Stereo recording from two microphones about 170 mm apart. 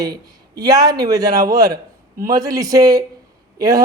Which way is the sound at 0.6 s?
25° right (ahead or behind).